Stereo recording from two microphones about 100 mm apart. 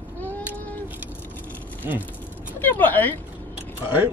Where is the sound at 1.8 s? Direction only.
25° right (ahead or behind).